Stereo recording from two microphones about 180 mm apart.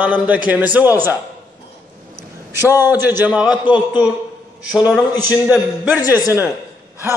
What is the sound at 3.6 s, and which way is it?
Speech, 25° left (ahead or behind).